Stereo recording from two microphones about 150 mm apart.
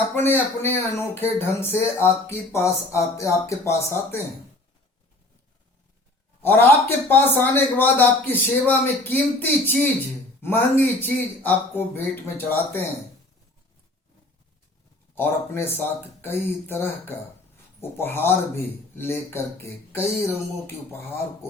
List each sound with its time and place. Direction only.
0.1 s speech: 15° left (ahead or behind)
6.4 s speech: 15° left (ahead or behind)
15.1 s speech: 15° left (ahead or behind)